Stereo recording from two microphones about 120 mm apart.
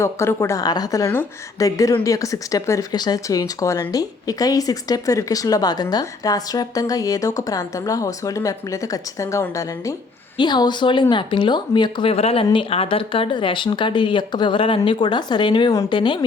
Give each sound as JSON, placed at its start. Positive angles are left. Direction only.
{"t": 0.0, "sound": "speech", "side_deg": 20}
{"t": 10.3, "sound": "speech", "side_deg": 40}
{"t": 12.1, "sound": "speech", "side_deg": 55}